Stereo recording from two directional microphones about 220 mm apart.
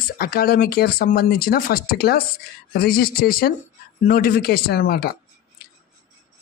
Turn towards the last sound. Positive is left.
turn(degrees=45)  # may be behind; listen again after turning